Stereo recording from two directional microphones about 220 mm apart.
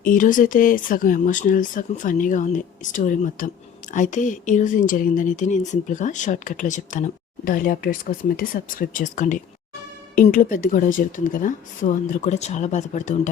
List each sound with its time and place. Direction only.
0.0 s speech: 35° left (ahead or behind)